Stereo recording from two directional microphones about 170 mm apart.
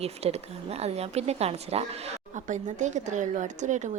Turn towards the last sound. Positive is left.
turn(degrees=-45)  # may be behind; listen again after turning